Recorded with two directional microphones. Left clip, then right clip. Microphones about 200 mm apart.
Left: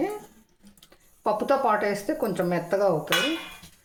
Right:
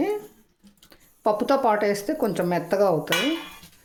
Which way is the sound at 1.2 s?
40° right (ahead or behind).